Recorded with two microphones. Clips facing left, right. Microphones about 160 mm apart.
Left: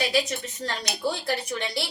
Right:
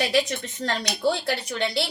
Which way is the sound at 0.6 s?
80° right.